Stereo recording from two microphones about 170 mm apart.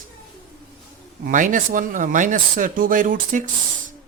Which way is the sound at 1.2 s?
50° right (ahead or behind).